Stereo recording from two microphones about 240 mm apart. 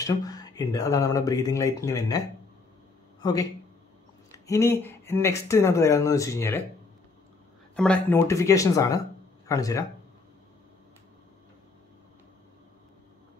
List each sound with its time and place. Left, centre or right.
0.0 s speech: centre
7.7 s speech: centre